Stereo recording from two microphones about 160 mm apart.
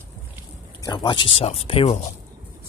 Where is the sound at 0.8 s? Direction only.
30° left (ahead or behind).